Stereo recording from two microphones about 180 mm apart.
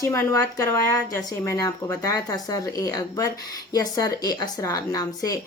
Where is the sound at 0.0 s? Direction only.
15° left (ahead or behind).